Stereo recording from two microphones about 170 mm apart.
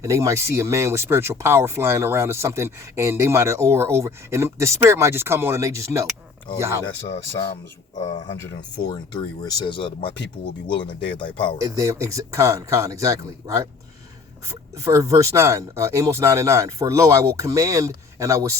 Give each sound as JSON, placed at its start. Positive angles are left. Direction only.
{"t": 0.0, "sound": "speech", "side_deg": -20}
{"t": 8.8, "sound": "speech", "side_deg": 25}
{"t": 11.2, "sound": "speech", "side_deg": 30}
{"t": 11.6, "sound": "speech", "side_deg": -20}